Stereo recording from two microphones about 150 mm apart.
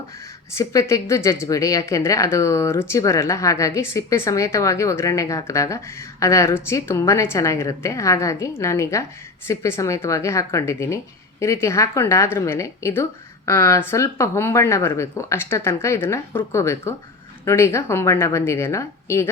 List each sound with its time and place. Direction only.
0.5 s a woman's voice: 20° left (ahead or behind)